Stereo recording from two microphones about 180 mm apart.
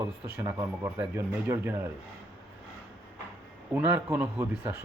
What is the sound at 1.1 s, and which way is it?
Speech, 15° right (ahead or behind).